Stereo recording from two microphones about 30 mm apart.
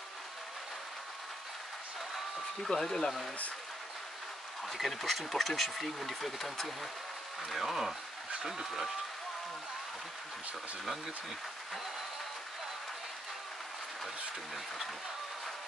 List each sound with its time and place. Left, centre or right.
2.7 s speech: centre
4.6 s speech: centre
7.6 s speech: centre
8.4 s speech: right